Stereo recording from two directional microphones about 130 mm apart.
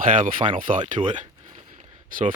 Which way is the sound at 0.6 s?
90° right.